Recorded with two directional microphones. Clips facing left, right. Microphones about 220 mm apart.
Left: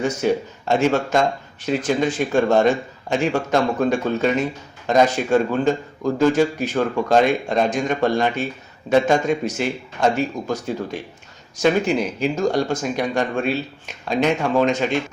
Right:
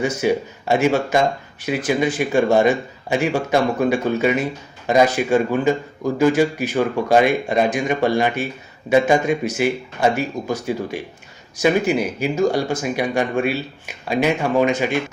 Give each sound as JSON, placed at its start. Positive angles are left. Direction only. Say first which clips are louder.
{"t": 0.0, "sound": "speech", "louder": "right 1 dB", "side_deg": -5}